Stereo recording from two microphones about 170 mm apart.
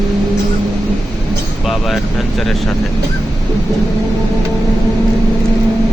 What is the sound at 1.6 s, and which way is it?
Speech, centre (ahead or behind).